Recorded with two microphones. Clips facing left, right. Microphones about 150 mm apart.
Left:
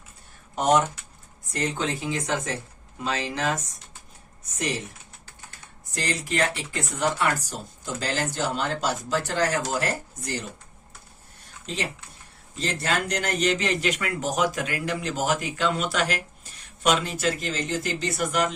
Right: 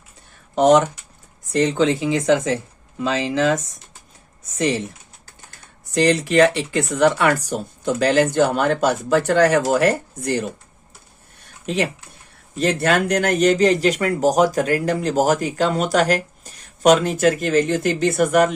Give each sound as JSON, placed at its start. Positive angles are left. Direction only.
{"t": 0.5, "sound": "speech", "side_deg": -90}
{"t": 5.9, "sound": "speech", "side_deg": -70}
{"t": 11.6, "sound": "speech", "side_deg": -60}